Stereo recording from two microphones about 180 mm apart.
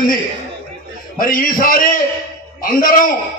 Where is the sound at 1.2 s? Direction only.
50° left (ahead or behind).